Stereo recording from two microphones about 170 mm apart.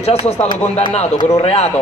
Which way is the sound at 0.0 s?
35° left (ahead or behind).